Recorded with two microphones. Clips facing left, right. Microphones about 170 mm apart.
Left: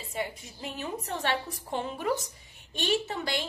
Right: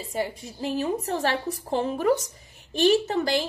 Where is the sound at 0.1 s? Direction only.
35° right (ahead or behind).